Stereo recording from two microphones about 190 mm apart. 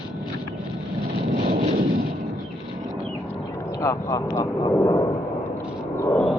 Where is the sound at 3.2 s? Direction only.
15° left (ahead or behind).